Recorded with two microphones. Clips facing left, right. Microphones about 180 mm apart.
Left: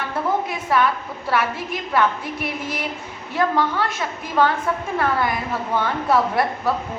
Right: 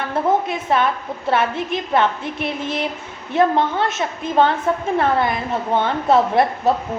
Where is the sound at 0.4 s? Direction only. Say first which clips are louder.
Right 1 dB; 25° right (ahead or behind).